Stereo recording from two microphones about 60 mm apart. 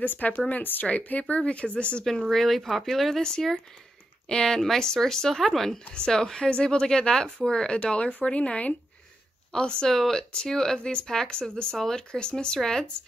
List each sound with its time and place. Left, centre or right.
0.0 s speech: left
2.2 s speech: centre